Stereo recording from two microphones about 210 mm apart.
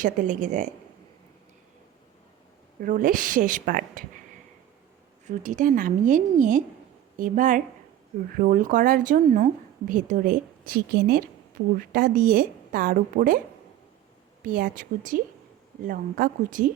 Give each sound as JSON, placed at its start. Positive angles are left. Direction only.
{"t": 0.0, "sound": "a woman's voice", "side_deg": -35}
{"t": 2.8, "sound": "a woman's voice", "side_deg": -40}
{"t": 5.2, "sound": "a woman's voice", "side_deg": -35}
{"t": 14.4, "sound": "a woman's voice", "side_deg": -40}